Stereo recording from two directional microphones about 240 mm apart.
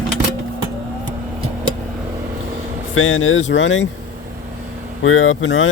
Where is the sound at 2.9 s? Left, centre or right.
Left.